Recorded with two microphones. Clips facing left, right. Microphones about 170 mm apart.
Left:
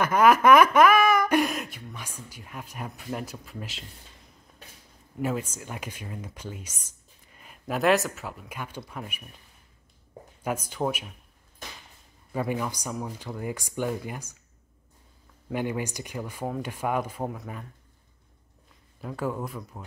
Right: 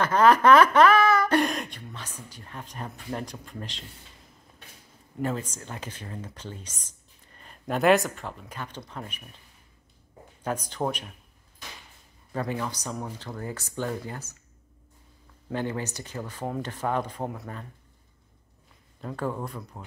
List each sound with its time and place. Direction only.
0.0 s speech: 10° left (ahead or behind)
5.2 s speech: 10° left (ahead or behind)
10.4 s speech: 10° left (ahead or behind)
12.3 s speech: 10° left (ahead or behind)
15.5 s speech: 15° left (ahead or behind)
18.9 s speech: 5° left (ahead or behind)